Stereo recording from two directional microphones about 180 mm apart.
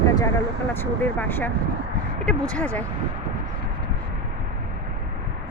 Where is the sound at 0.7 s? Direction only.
10° left (ahead or behind).